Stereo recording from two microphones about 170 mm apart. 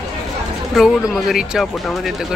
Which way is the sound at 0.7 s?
Centre (ahead or behind).